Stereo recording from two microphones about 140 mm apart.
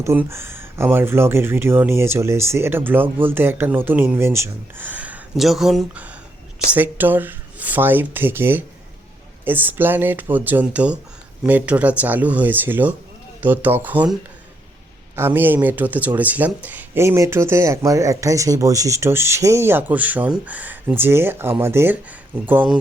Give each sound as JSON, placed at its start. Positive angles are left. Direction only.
{"t": 0.0, "sound": "speech", "side_deg": -20}
{"t": 15.1, "sound": "speech", "side_deg": -15}